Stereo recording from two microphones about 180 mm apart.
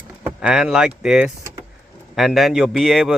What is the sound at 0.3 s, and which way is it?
A man's voice, 5° right (ahead or behind).